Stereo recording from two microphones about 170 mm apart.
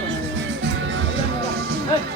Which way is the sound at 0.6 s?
90° right.